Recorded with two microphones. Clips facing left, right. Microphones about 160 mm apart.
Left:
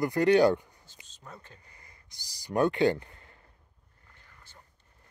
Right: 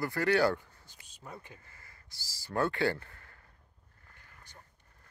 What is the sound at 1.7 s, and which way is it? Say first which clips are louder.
Speech: even; 20° left (ahead or behind).